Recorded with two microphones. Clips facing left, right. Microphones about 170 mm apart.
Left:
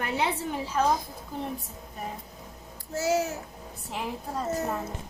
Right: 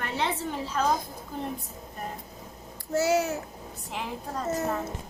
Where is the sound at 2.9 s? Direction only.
70° right (ahead or behind).